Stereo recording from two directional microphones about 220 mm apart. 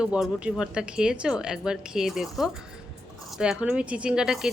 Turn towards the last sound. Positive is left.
turn(degrees=0)  # may be behind; listen again after turning